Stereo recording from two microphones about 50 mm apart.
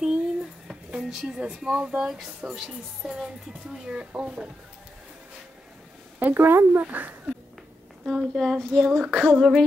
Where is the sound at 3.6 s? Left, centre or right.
Centre.